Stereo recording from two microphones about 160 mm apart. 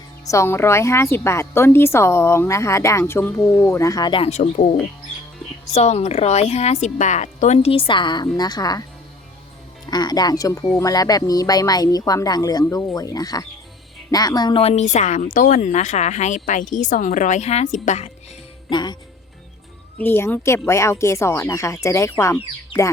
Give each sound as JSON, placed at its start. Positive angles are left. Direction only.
{"t": 0.3, "sound": "a woman's voice", "side_deg": 15}
{"t": 4.3, "sound": "speech", "side_deg": 45}
{"t": 5.7, "sound": "speech", "side_deg": 45}
{"t": 9.9, "sound": "speech", "side_deg": 25}
{"t": 18.7, "sound": "speech", "side_deg": 25}
{"t": 20.0, "sound": "a woman's voice", "side_deg": 15}